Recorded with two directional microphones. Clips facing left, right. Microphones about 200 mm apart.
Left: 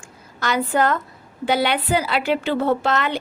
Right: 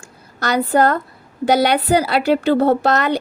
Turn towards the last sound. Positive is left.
turn(degrees=-40)  # may be behind; listen again after turning